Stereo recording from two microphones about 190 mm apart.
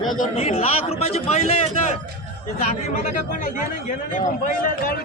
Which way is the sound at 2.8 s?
40° left (ahead or behind).